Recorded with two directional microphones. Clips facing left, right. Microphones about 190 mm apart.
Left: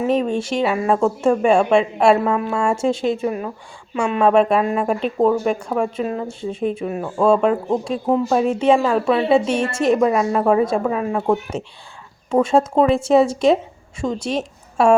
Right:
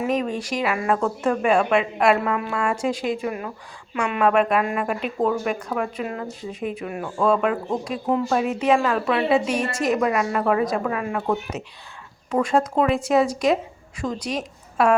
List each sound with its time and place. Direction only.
0.0 s a woman's voice: 25° left (ahead or behind)